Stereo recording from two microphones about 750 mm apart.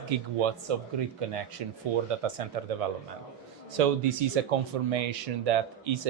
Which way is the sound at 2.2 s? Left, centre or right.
Right.